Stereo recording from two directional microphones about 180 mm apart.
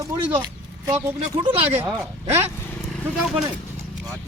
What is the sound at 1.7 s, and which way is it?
Speech, 5° right (ahead or behind).